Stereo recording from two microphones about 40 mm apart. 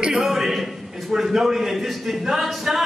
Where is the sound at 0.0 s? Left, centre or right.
Centre.